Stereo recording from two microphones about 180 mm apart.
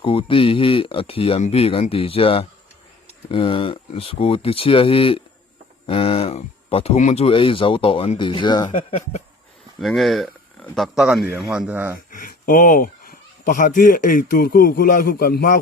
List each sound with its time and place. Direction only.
0.0 s speech: 30° left (ahead or behind)
8.9 s speech: 35° left (ahead or behind)
9.8 s a man's voice: centre (ahead or behind)
12.1 s speech: 50° left (ahead or behind)